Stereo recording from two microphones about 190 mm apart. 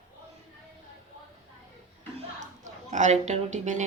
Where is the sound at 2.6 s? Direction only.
40° right (ahead or behind).